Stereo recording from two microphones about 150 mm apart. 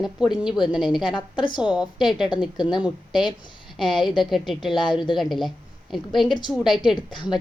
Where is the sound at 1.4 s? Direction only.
30° left (ahead or behind).